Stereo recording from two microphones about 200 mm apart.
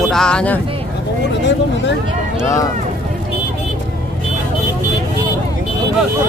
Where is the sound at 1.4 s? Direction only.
60° left (ahead or behind).